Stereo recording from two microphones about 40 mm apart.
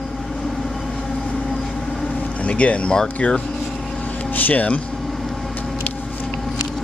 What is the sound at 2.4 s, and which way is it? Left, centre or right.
Speech, left.